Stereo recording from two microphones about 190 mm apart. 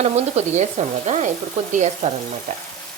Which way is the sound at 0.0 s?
35° right (ahead or behind).